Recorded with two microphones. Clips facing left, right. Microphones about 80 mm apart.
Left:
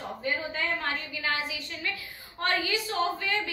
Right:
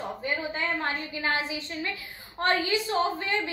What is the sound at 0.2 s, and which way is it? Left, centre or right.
A woman's voice, right.